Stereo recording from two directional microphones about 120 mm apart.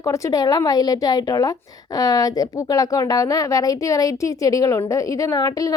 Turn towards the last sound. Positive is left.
turn(degrees=30)  # may be behind; listen again after turning